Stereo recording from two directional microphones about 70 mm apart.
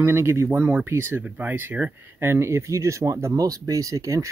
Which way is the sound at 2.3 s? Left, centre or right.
Right.